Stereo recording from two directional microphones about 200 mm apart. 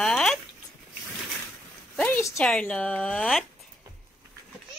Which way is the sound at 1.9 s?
10° left (ahead or behind).